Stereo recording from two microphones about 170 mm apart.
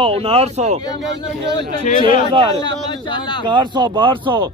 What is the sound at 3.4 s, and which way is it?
Speech, 25° right (ahead or behind).